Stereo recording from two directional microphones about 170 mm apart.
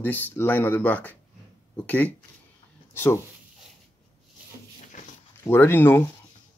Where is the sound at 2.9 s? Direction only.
15° left (ahead or behind).